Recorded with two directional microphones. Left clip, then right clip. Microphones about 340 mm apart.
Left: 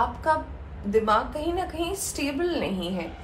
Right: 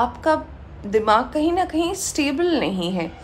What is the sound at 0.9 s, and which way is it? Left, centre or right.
A woman's voice, right.